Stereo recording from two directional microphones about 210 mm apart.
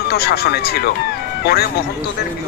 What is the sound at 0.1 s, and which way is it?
Speech, 50° left (ahead or behind).